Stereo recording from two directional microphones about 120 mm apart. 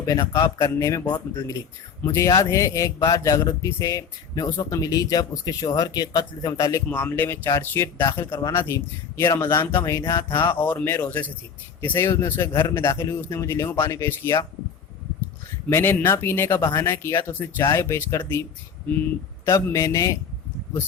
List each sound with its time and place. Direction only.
0.0 s speech: 25° left (ahead or behind)
6.9 s speech: 15° left (ahead or behind)
15.7 s speech: 20° left (ahead or behind)
19.6 s speech: 25° left (ahead or behind)